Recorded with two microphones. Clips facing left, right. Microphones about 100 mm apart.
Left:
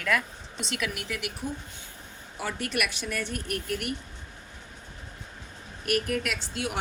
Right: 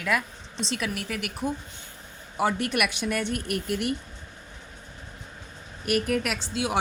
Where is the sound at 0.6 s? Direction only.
30° right (ahead or behind).